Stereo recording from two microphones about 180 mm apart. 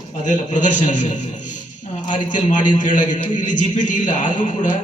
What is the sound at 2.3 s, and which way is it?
A man's voice, 45° left (ahead or behind).